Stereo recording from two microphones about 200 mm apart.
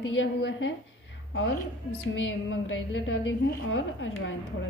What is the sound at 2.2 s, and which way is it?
A woman's voice, 80° left.